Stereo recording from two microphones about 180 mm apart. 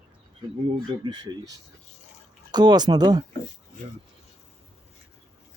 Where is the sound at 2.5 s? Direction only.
25° right (ahead or behind).